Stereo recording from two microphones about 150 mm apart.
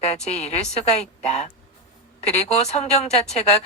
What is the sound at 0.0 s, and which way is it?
Speech, 45° left (ahead or behind).